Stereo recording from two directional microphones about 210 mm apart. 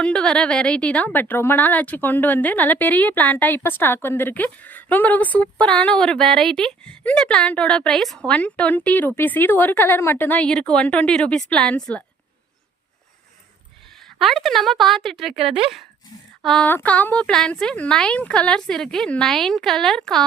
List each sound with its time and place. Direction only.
0.0 s a woman's voice: 5° left (ahead or behind)
14.0 s speech: centre (ahead or behind)
16.4 s speech: centre (ahead or behind)